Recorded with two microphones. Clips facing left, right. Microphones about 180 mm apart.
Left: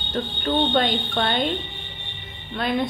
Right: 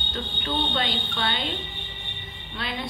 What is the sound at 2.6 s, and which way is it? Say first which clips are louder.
Speech: left 9 dB; 50° left (ahead or behind).